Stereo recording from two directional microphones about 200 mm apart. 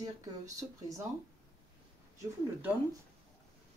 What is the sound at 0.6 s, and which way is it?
Speech, 15° right (ahead or behind).